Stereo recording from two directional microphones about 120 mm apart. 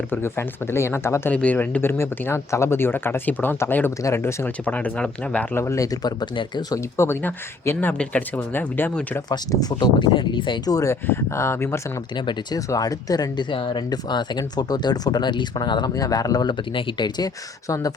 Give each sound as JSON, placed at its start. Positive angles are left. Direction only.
{"t": 0.1, "sound": "speech", "side_deg": 20}
{"t": 5.5, "sound": "speech", "side_deg": 25}
{"t": 6.9, "sound": "speech", "side_deg": 20}
{"t": 9.3, "sound": "speech", "side_deg": 30}
{"t": 12.2, "sound": "speech", "side_deg": 35}